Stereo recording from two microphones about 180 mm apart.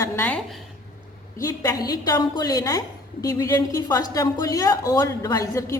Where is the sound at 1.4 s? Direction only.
20° left (ahead or behind).